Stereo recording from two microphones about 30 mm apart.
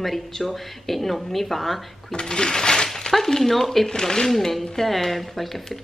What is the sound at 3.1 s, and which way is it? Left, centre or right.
Speech, centre.